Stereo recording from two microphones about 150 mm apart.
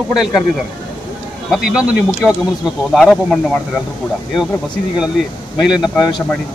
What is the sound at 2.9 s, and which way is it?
Speech, 5° left (ahead or behind).